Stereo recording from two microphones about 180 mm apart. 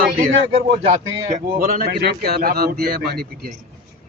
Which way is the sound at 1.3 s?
55° right (ahead or behind).